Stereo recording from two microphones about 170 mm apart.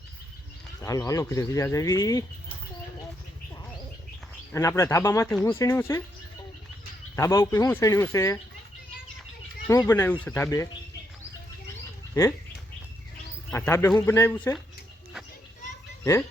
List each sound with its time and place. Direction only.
0.8 s speech: 20° left (ahead or behind)
4.5 s speech: 15° left (ahead or behind)
7.2 s speech: 20° left (ahead or behind)
9.6 s speech: 15° left (ahead or behind)
13.5 s speech: 15° left (ahead or behind)